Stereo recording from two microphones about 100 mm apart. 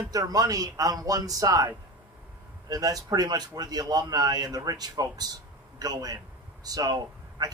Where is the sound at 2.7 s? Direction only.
40° right (ahead or behind).